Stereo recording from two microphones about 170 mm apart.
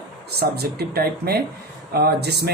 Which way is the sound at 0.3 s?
70° right (ahead or behind).